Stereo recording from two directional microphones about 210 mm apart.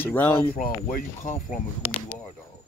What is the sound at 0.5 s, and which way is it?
Speech, 45° left (ahead or behind).